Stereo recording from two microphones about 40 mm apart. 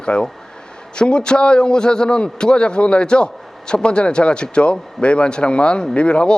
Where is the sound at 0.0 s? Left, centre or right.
Left.